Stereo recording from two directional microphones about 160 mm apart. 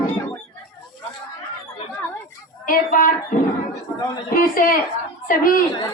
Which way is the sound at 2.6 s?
60° left (ahead or behind).